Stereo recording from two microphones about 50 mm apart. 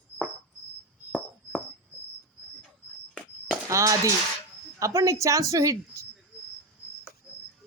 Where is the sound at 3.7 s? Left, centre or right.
Right.